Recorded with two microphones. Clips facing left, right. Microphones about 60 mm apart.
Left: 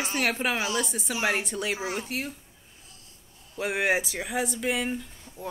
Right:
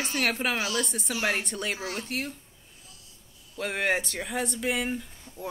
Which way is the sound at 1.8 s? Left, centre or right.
Centre.